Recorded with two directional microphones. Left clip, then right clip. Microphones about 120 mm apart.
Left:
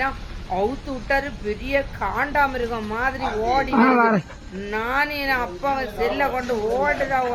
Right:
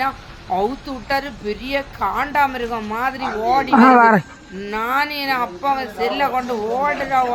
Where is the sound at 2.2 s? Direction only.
20° right (ahead or behind).